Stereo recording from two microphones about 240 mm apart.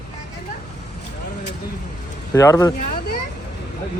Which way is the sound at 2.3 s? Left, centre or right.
Centre.